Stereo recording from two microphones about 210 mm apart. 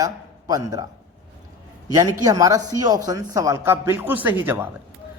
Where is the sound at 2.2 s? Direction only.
15° right (ahead or behind).